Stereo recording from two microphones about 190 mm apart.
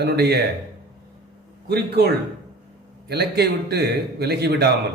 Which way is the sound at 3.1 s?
60° right (ahead or behind).